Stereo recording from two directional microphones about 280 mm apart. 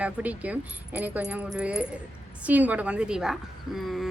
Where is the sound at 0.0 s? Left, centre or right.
Centre.